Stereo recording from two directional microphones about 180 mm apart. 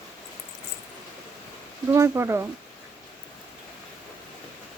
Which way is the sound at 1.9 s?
15° right (ahead or behind).